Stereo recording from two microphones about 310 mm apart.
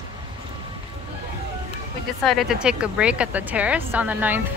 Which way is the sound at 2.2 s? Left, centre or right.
Centre.